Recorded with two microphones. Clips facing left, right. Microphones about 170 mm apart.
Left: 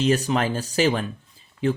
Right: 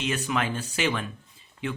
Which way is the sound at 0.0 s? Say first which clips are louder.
Left 7 dB; 35° left (ahead or behind).